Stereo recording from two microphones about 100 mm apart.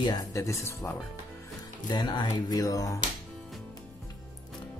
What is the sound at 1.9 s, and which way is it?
Speech, 50° left (ahead or behind).